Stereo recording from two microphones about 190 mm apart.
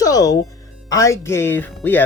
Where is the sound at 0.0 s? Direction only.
20° left (ahead or behind).